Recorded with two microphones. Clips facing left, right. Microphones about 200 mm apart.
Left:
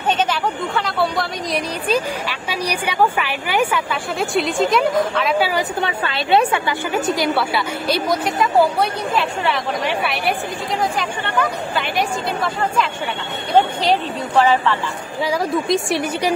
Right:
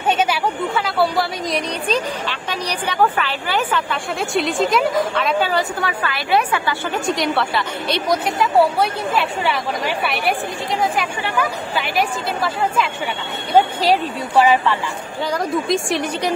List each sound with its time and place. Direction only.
0.2 s a woman's voice: 5° right (ahead or behind)
1.9 s a woman's voice: 10° left (ahead or behind)
5.4 s a woman's voice: 10° left (ahead or behind)
5.8 s a woman's voice: 25° left (ahead or behind)
6.9 s a woman's voice: 5° left (ahead or behind)
15.2 s a woman's voice: 5° left (ahead or behind)